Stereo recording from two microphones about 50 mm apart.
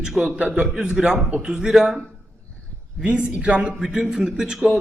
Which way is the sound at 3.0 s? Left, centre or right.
Right.